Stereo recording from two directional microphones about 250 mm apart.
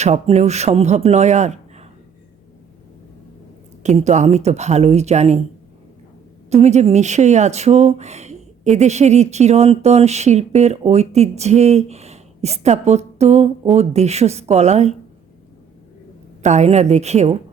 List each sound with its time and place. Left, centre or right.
0.0 s speech: right
3.8 s speech: right
6.5 s speech: right
16.4 s speech: right